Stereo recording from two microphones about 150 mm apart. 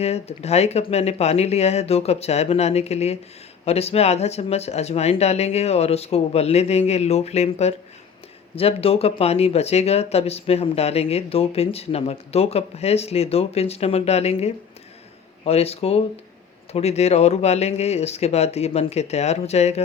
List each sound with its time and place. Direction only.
0.0 s speech: 45° left (ahead or behind)